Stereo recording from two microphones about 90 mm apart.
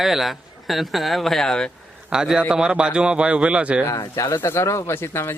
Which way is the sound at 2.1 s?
5° right (ahead or behind).